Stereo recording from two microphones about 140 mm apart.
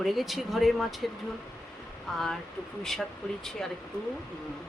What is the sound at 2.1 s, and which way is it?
Speech, centre (ahead or behind).